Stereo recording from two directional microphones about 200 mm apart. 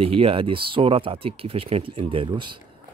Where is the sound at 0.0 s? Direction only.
30° right (ahead or behind).